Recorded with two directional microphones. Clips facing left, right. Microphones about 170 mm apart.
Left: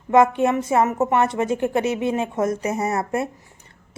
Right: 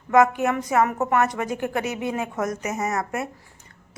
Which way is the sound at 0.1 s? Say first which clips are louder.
Left 2 dB; 25° left (ahead or behind).